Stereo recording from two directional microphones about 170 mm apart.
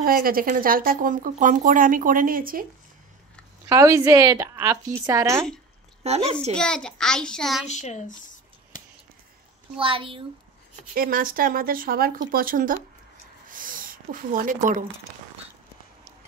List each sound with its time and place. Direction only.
0.0 s speech: 60° right (ahead or behind)
3.6 s a woman's voice: 15° right (ahead or behind)
6.0 s a child's voice: 40° right (ahead or behind)
6.5 s a child's voice: 5° left (ahead or behind)
7.6 s speech: 45° left (ahead or behind)
9.8 s a child's voice: 30° right (ahead or behind)
11.0 s speech: 55° right (ahead or behind)
13.5 s a sound: 55° right (ahead or behind)